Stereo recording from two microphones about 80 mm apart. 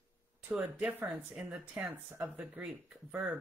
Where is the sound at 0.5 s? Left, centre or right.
Centre.